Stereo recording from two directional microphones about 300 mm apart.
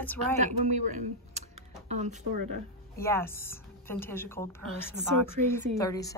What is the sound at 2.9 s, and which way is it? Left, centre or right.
A woman's voice, centre.